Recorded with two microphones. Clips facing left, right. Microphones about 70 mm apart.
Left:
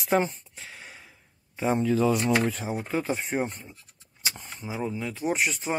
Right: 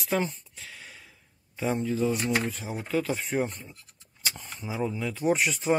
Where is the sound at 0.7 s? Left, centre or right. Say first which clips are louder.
Left 2 dB; centre.